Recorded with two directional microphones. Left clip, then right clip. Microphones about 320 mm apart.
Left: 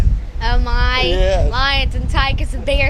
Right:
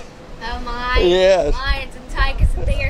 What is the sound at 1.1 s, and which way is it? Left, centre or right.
Speech, right.